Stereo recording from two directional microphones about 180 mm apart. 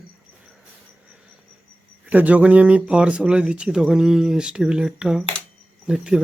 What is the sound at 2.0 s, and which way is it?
Speech, 10° right (ahead or behind).